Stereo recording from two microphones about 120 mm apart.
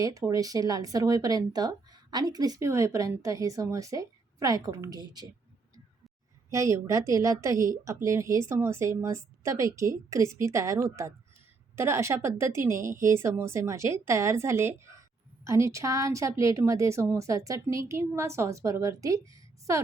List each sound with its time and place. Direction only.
0.0 s speech: 25° right (ahead or behind)
6.5 s speech: 25° right (ahead or behind)